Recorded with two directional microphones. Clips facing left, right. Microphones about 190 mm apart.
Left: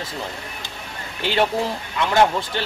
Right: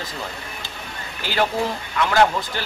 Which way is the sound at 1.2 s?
25° left (ahead or behind).